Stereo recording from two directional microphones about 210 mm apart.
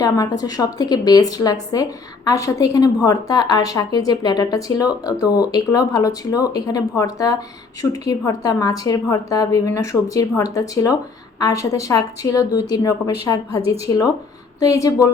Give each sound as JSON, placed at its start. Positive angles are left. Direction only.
{"t": 0.0, "sound": "a woman's voice", "side_deg": 15}